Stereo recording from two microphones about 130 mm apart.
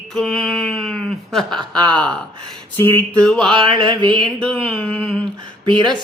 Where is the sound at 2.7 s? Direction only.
15° left (ahead or behind).